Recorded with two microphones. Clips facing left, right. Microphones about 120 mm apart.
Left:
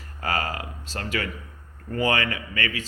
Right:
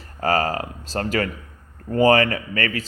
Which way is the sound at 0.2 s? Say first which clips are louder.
Right 7 dB; 40° right (ahead or behind).